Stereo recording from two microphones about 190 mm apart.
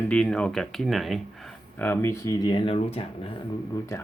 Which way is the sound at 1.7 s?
10° left (ahead or behind).